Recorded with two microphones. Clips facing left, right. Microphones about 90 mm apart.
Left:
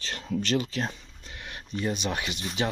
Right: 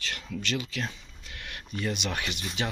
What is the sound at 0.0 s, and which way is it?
Speech, 35° left (ahead or behind).